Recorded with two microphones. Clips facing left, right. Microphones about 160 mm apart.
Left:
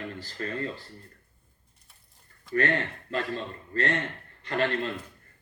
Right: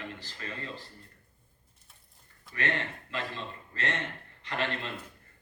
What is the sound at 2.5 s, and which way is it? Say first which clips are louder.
Speech: left 7 dB; 40° left (ahead or behind).